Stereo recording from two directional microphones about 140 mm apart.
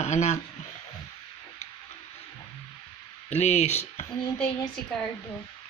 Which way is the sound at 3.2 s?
50° left (ahead or behind).